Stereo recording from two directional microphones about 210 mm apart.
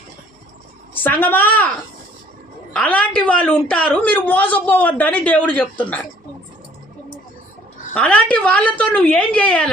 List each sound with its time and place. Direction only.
1.0 s a woman's voice: 10° left (ahead or behind)
2.7 s a woman's voice: 5° left (ahead or behind)
7.9 s a woman's voice: 5° left (ahead or behind)